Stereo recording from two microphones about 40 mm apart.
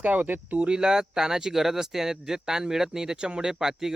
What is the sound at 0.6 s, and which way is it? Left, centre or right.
Speech, right.